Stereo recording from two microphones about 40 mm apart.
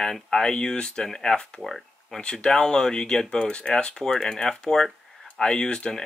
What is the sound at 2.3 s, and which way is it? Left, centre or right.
Speech, centre.